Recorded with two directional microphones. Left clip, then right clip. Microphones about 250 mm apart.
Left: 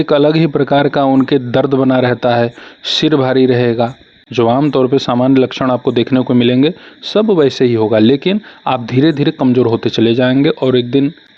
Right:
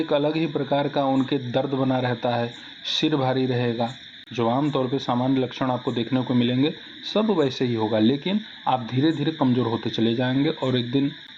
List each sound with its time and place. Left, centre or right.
0.0 s speech: left